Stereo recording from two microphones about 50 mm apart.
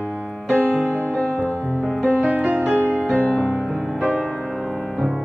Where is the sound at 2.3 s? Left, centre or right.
Right.